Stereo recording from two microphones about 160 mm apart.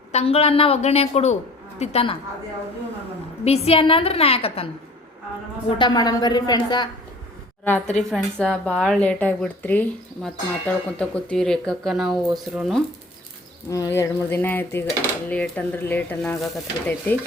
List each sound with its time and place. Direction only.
0.1 s a woman's voice: 40° left (ahead or behind)
3.4 s a woman's voice: 40° left (ahead or behind)
5.7 s a woman's voice: 25° left (ahead or behind)
7.6 s speech: 10° left (ahead or behind)
13.7 s speech: 20° left (ahead or behind)